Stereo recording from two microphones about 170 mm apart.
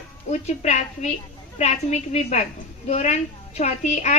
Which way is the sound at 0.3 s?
40° left (ahead or behind).